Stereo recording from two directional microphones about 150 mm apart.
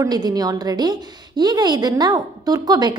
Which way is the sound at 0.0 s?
25° right (ahead or behind).